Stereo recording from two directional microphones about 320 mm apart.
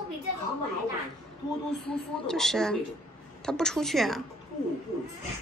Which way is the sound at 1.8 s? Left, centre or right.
Centre.